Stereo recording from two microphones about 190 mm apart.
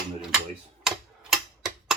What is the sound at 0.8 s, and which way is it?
Tick-tock, 5° right (ahead or behind).